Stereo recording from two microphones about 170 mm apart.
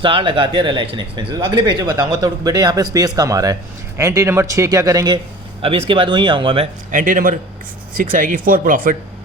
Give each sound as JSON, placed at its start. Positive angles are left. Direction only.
{"t": 0.0, "sound": "speech", "side_deg": -30}
{"t": 6.9, "sound": "speech", "side_deg": -50}